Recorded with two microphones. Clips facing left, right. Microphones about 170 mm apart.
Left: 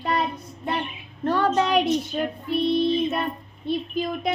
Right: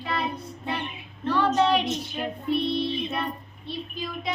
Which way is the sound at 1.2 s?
45° left (ahead or behind).